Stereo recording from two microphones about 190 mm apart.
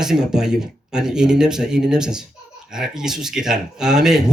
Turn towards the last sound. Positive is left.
turn(degrees=-5)  # may be behind; listen again after turning